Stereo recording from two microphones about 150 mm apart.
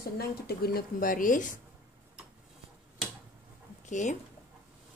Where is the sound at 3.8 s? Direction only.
55° left (ahead or behind).